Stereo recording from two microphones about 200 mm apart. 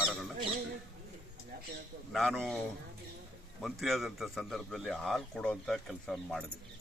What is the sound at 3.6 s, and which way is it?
A man's voice, centre (ahead or behind).